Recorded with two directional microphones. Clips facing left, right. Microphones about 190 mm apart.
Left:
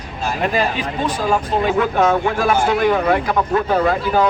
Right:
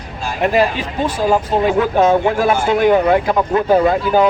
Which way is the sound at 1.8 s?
15° right (ahead or behind).